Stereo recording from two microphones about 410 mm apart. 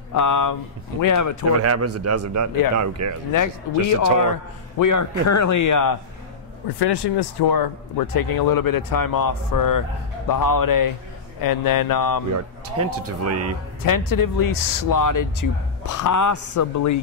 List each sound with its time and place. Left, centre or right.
0.1 s speech: left
1.6 s a man's voice: right
3.3 s speech: left
6.8 s speech: left
12.6 s a man's voice: right
13.8 s speech: left